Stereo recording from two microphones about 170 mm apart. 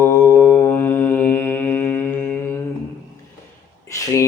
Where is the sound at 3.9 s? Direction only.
20° left (ahead or behind).